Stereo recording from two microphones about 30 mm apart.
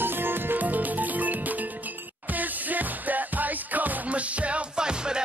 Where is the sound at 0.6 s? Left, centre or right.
Right.